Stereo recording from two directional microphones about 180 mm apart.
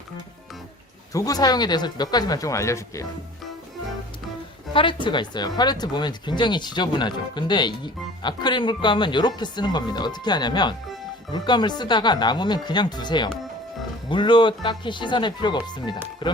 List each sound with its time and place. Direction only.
1.1 s speech: 20° left (ahead or behind)
4.7 s speech: 30° left (ahead or behind)
16.2 s music: 25° left (ahead or behind)